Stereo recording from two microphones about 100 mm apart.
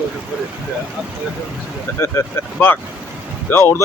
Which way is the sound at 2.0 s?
25° left (ahead or behind).